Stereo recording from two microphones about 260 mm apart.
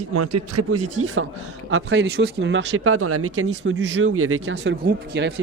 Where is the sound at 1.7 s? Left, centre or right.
Right.